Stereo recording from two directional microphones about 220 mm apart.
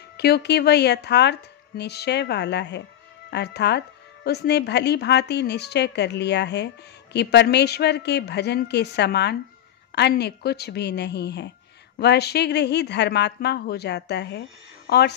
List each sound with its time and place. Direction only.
0.2 s speech: 50° left (ahead or behind)